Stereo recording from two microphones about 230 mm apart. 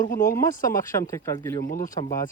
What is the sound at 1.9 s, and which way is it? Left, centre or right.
Speech, centre.